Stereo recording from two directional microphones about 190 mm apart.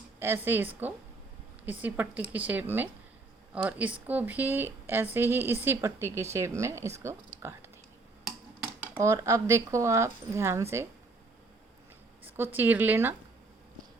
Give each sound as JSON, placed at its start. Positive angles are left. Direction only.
{"t": 0.2, "sound": "speech", "side_deg": -10}
{"t": 8.6, "sound": "speech", "side_deg": -15}
{"t": 12.2, "sound": "a woman's voice", "side_deg": -10}